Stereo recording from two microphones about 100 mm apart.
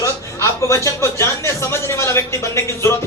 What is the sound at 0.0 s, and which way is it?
Speech, 30° left (ahead or behind).